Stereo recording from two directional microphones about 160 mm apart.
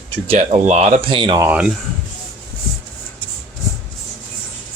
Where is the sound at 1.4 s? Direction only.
10° right (ahead or behind).